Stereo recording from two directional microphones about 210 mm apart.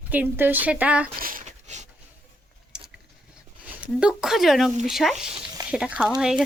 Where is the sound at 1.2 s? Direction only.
35° right (ahead or behind).